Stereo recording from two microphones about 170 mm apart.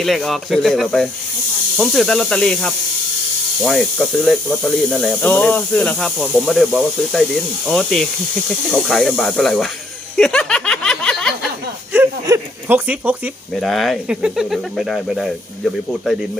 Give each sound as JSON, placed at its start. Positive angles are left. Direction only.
{"t": 0.0, "sound": "speech", "side_deg": 0}
{"t": 10.2, "sound": "a sound", "side_deg": 5}
{"t": 11.9, "sound": "speech", "side_deg": -15}